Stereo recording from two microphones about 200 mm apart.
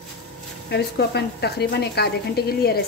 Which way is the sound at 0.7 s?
55° left (ahead or behind).